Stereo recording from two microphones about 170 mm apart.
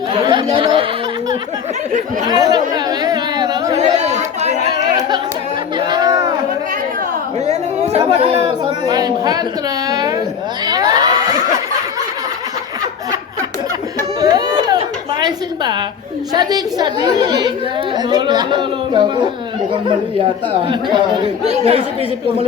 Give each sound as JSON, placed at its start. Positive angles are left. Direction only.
{"t": 0.2, "sound": "a sound", "side_deg": -30}
{"t": 2.3, "sound": "chatter", "side_deg": -25}
{"t": 3.8, "sound": "chatter", "side_deg": -40}
{"t": 4.9, "sound": "a sound", "side_deg": -25}
{"t": 5.7, "sound": "crowd", "side_deg": -25}
{"t": 7.4, "sound": "chatter", "side_deg": -40}
{"t": 8.4, "sound": "a man's voice", "side_deg": -20}
{"t": 10.7, "sound": "crowd", "side_deg": -20}
{"t": 14.2, "sound": "a sound", "side_deg": -25}
{"t": 16.3, "sound": "a woman's voice", "side_deg": -25}
{"t": 20.1, "sound": "a woman's voice", "side_deg": -30}
{"t": 21.4, "sound": "speech", "side_deg": -40}